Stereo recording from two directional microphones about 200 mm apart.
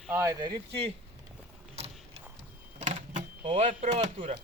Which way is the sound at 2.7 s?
35° right (ahead or behind).